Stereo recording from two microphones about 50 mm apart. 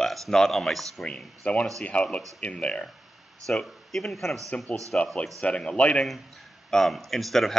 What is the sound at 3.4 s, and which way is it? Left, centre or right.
Speech, centre.